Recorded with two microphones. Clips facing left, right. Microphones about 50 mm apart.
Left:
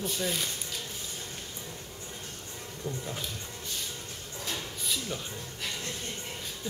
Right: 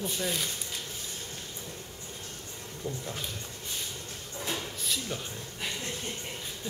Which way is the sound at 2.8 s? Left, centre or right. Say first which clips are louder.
Even; right.